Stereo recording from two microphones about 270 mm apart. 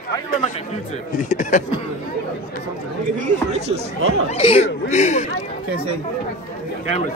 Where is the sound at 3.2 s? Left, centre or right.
Right.